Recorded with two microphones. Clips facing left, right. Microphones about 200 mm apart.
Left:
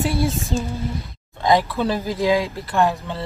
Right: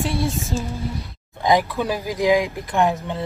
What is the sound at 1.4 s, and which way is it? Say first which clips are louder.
Speech: left 1 dB; 15° right (ahead or behind).